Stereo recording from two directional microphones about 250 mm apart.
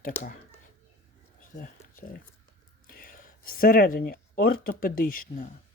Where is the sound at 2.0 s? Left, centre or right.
Left.